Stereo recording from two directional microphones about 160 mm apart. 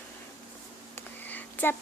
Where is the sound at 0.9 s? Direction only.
10° left (ahead or behind).